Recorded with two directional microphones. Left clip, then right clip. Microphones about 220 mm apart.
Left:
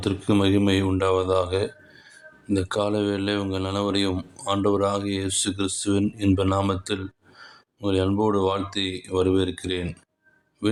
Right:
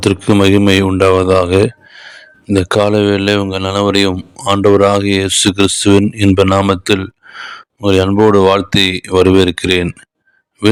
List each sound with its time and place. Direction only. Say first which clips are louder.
0.0 s speech: right 12 dB; 40° right (ahead or behind)